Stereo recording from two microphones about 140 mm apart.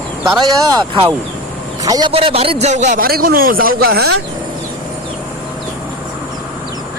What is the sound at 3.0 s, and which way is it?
Speech, 90° right.